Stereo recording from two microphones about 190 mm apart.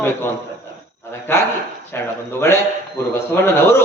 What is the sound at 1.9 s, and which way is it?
A man's voice, 10° left (ahead or behind).